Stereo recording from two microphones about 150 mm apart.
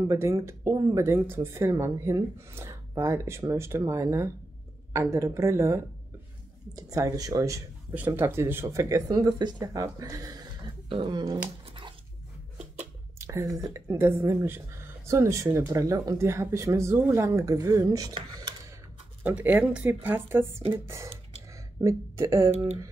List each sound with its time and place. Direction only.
0.0 s speech: 20° right (ahead or behind)
11.6 s a sound: 35° right (ahead or behind)
13.2 s speech: 20° right (ahead or behind)
19.2 s speech: 10° right (ahead or behind)